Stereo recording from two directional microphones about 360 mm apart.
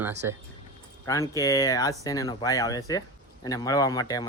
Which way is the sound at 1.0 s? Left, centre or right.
Centre.